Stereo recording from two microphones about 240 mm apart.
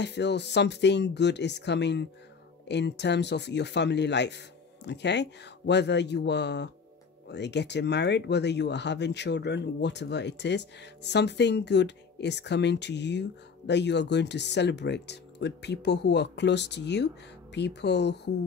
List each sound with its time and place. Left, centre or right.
0.0 s speech: left